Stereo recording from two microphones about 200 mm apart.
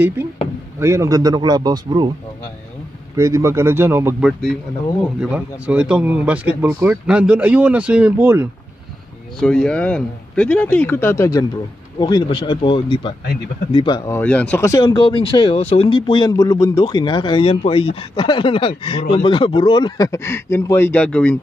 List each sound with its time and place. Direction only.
0.7 s a man's voice: 15° right (ahead or behind)
3.2 s speech: 15° right (ahead or behind)
9.4 s speech: 5° left (ahead or behind)